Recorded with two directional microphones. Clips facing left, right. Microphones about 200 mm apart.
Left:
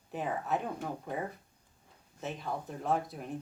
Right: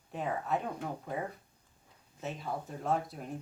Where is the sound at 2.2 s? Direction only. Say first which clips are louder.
Even; centre (ahead or behind).